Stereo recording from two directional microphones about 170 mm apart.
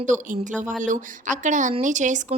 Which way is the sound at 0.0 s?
50° right (ahead or behind).